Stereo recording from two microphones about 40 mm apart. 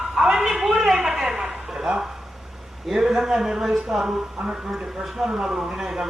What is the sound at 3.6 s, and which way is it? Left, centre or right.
A man's voice, centre.